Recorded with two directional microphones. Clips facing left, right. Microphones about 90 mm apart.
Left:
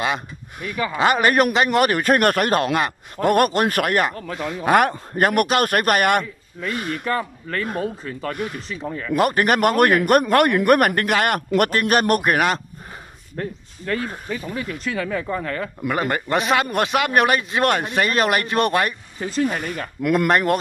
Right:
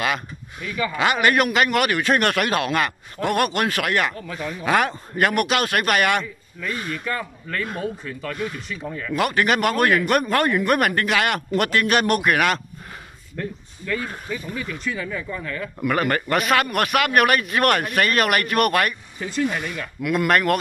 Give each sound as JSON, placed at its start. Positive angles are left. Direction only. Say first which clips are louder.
{"t": 0.9, "sound": "a man's voice", "louder": "left 2 dB", "side_deg": 35}
{"t": 10.2, "sound": "a man's voice", "louder": "left 4 dB", "side_deg": 65}
{"t": 11.0, "sound": "a man's voice", "louder": "left 2 dB", "side_deg": 45}
{"t": 14.9, "sound": "a man's voice", "louder": "left 4 dB", "side_deg": 60}
{"t": 15.2, "sound": "speech", "louder": "left 4 dB", "side_deg": 45}
{"t": 15.8, "sound": "a man's voice", "louder": "right 2 dB", "side_deg": 20}
{"t": 20.2, "sound": "a man's voice", "louder": "right 1 dB", "side_deg": 25}